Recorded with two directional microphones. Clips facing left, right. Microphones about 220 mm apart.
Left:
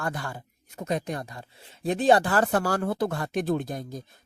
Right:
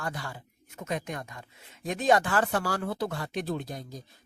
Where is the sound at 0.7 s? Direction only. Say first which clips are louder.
Left 4 dB; 35° left (ahead or behind).